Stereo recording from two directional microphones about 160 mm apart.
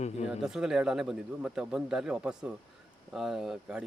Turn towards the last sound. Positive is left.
turn(degrees=-5)  # may be behind; listen again after turning